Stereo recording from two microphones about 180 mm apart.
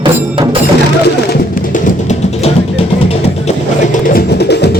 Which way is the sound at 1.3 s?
40° left (ahead or behind).